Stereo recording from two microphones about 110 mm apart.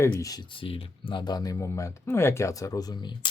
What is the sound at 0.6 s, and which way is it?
Speech, 50° left (ahead or behind).